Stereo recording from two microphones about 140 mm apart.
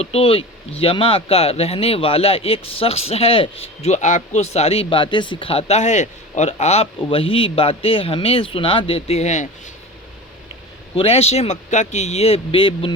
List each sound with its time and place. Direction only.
0.0 s speech: 45° left (ahead or behind)
10.9 s speech: 45° left (ahead or behind)